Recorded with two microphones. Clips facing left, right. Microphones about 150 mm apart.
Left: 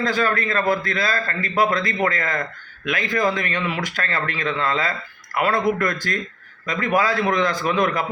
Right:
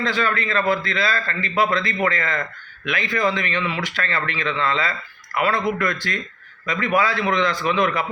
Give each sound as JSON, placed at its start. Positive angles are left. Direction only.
{"t": 0.0, "sound": "speech", "side_deg": 45}